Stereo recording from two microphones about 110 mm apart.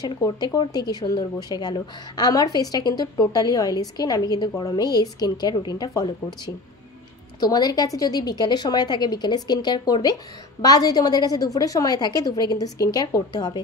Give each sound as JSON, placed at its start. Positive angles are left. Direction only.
{"t": 0.0, "sound": "a woman's voice", "side_deg": 40}